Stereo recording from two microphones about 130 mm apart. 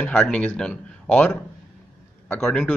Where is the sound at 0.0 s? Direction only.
10° left (ahead or behind).